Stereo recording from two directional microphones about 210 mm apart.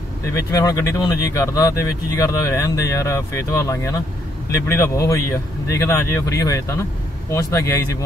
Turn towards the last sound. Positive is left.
turn(degrees=15)  # may be behind; listen again after turning